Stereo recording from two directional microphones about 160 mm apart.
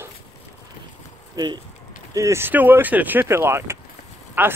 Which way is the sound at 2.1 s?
20° right (ahead or behind).